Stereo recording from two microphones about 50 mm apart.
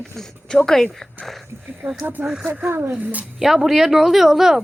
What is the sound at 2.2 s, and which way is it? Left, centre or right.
Speech, centre.